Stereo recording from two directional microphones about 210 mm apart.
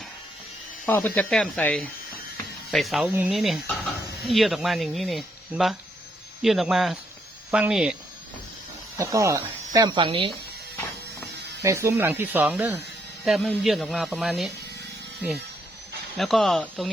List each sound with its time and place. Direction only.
0.9 s speech: 10° left (ahead or behind)
9.0 s speech: 15° right (ahead or behind)
11.3 s a sound: 50° right (ahead or behind)
11.6 s speech: 15° right (ahead or behind)
16.1 s speech: centre (ahead or behind)